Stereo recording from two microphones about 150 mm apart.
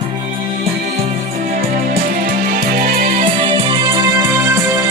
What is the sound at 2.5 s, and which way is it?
Music, 75° right (ahead or behind).